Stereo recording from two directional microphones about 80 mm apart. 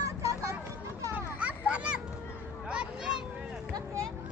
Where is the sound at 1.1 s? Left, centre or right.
Centre.